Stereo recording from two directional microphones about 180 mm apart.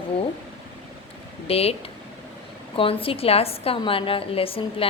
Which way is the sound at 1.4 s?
35° left (ahead or behind).